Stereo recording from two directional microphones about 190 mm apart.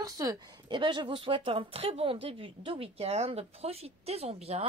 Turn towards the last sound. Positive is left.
turn(degrees=-35)  # may be behind; listen again after turning